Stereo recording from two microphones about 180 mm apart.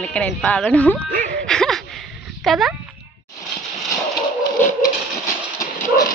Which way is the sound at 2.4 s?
Centre (ahead or behind).